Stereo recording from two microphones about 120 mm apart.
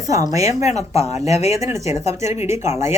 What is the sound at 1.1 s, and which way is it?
Speech, 65° left (ahead or behind).